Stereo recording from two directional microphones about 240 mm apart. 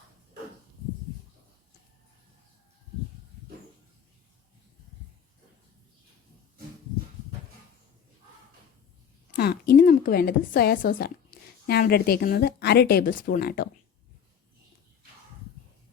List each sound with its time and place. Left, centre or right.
9.3 s a woman's voice: left